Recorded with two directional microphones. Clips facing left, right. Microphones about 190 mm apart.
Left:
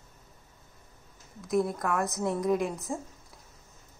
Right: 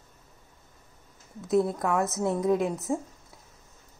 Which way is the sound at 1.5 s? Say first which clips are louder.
Right 3 dB; 25° right (ahead or behind).